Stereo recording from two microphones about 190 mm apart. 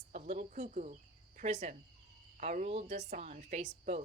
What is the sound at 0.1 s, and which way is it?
A woman's voice, 40° right (ahead or behind).